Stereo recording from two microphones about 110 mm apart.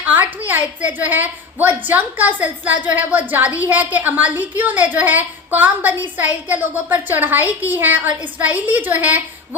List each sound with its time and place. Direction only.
0.0 s a woman's voice: 15° right (ahead or behind)